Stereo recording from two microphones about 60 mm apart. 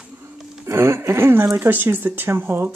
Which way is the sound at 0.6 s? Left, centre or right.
Right.